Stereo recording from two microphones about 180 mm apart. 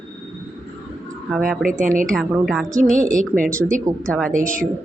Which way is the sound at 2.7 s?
50° right (ahead or behind).